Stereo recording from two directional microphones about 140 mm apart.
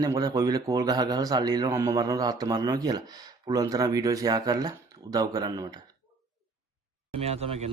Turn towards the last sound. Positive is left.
turn(degrees=-45)  # may be behind; listen again after turning